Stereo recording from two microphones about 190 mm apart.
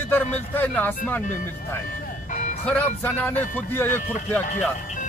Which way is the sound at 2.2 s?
40° left (ahead or behind).